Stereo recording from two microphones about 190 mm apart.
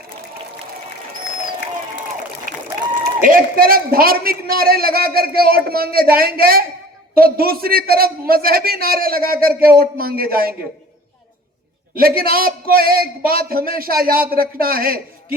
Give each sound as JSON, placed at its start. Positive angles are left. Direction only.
{"t": 2.5, "sound": "a sound", "side_deg": -45}
{"t": 3.2, "sound": "a man's voice", "side_deg": -45}
{"t": 11.9, "sound": "a man's voice", "side_deg": -50}